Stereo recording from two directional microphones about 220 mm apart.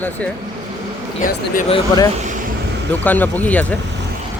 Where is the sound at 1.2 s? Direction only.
35° left (ahead or behind).